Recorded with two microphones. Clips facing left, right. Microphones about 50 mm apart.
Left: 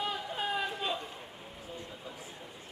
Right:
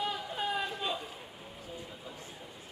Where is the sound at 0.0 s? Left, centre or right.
Centre.